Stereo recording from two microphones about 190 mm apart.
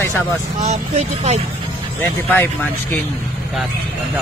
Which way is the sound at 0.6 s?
35° right (ahead or behind).